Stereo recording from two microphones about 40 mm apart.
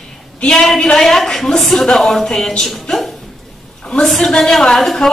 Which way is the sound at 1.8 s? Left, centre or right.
Centre.